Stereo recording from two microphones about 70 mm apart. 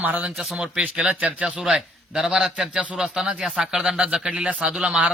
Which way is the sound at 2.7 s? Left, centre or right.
Centre.